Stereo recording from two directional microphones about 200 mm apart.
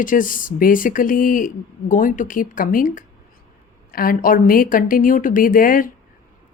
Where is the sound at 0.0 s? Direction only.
40° left (ahead or behind).